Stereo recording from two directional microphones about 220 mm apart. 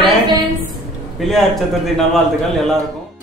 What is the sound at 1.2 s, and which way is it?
Speech, centre (ahead or behind).